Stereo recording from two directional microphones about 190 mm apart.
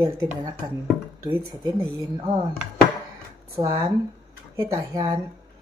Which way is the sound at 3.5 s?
15° right (ahead or behind).